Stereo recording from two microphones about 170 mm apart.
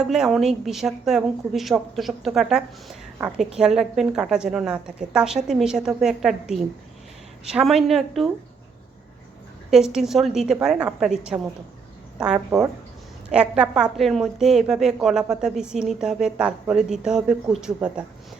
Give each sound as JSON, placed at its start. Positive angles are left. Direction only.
{"t": 0.0, "sound": "a woman's voice", "side_deg": -5}
{"t": 9.6, "sound": "a woman's voice", "side_deg": 0}